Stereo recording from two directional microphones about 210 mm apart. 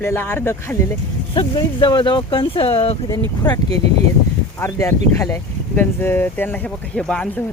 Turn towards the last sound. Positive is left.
turn(degrees=5)  # may be behind; listen again after turning